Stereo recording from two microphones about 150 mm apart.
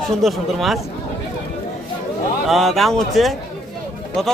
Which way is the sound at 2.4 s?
Centre (ahead or behind).